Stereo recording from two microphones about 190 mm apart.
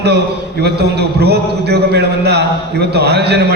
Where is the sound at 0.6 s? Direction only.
60° right (ahead or behind).